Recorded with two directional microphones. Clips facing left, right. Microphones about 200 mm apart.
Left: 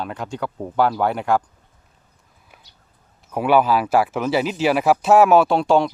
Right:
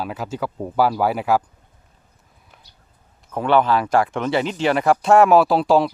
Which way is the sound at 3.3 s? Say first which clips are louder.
Left 1 dB; 10° left (ahead or behind).